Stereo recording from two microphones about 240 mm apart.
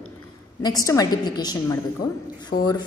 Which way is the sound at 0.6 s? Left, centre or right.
Centre.